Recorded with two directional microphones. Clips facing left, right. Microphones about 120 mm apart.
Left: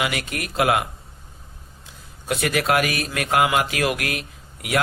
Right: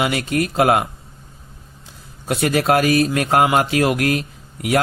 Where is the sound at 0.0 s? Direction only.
30° right (ahead or behind).